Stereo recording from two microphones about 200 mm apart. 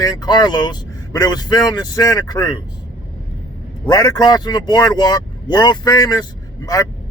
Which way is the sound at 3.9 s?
20° left (ahead or behind).